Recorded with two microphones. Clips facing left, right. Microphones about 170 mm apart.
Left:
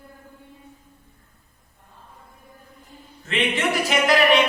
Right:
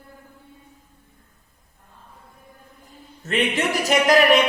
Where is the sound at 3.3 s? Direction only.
40° right (ahead or behind).